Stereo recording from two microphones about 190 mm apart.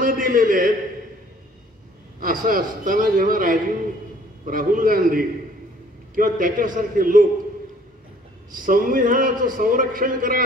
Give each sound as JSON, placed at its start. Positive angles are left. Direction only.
{"t": 0.0, "sound": "a man's voice", "side_deg": -45}
{"t": 2.1, "sound": "a man's voice", "side_deg": -45}
{"t": 8.5, "sound": "a man's voice", "side_deg": -45}